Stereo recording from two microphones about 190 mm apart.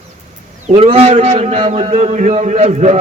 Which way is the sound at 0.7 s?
30° right (ahead or behind).